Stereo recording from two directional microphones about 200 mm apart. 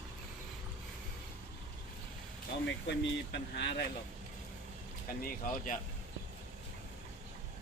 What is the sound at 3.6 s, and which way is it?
Speech, 55° left (ahead or behind).